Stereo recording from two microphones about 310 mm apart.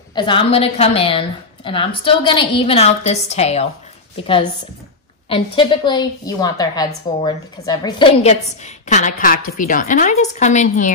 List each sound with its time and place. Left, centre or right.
0.1 s a woman's voice: centre
5.3 s a woman's voice: centre